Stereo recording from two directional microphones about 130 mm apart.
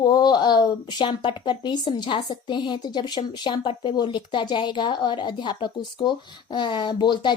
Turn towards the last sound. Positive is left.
turn(degrees=35)  # may be behind; listen again after turning